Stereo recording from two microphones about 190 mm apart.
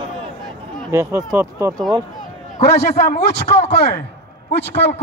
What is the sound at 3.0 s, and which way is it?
A man's voice, 55° left (ahead or behind).